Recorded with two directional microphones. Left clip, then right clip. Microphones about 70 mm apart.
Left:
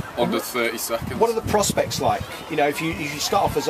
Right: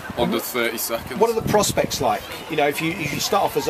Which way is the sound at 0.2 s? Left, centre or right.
Centre.